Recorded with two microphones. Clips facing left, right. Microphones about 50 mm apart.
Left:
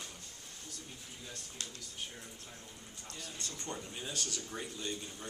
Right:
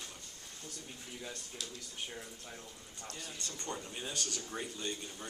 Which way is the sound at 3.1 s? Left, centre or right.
Right.